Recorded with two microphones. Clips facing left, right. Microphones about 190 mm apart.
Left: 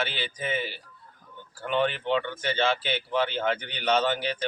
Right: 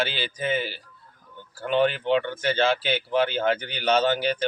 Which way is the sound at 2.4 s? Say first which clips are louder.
Right 3 dB; 5° right (ahead or behind).